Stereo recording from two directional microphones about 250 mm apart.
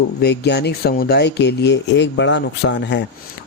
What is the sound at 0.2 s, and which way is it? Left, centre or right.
Speech, left.